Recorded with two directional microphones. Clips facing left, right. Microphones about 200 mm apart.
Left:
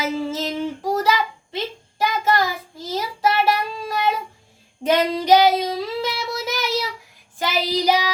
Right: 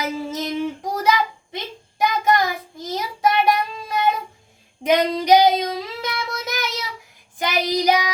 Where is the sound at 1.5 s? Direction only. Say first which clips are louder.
Left 4 dB; 20° right (ahead or behind).